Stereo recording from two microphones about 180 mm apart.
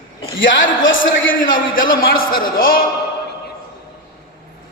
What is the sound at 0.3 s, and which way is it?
A man's voice, 90° left.